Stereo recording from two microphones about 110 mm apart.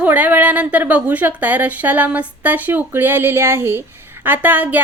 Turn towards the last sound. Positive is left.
turn(degrees=-15)  # may be behind; listen again after turning